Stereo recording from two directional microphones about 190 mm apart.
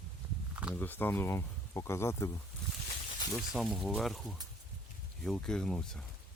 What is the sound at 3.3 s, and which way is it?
Speech, centre (ahead or behind).